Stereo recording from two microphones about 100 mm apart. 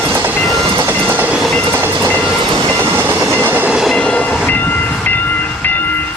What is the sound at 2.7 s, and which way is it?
Train, 25° right (ahead or behind).